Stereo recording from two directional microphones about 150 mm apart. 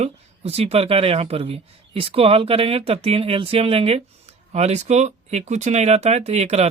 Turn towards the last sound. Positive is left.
turn(degrees=-45)  # may be behind; listen again after turning